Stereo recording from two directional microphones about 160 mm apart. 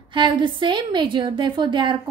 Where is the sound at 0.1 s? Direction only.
30° right (ahead or behind).